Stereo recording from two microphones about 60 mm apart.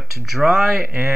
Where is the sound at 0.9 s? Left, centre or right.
Right.